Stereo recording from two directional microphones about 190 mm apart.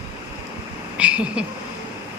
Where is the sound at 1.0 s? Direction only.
5° right (ahead or behind).